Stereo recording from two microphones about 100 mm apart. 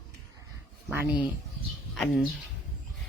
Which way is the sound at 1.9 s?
5° left (ahead or behind).